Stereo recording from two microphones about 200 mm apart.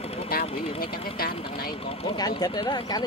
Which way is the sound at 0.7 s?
50° left (ahead or behind).